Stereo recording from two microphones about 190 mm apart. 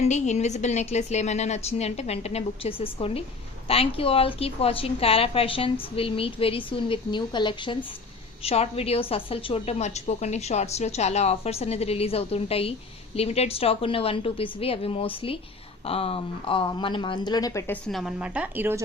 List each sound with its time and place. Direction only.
0.0 s a woman's voice: 35° left (ahead or behind); by 17.7 s 15° left (ahead or behind)
17.8 s a woman's voice: centre (ahead or behind)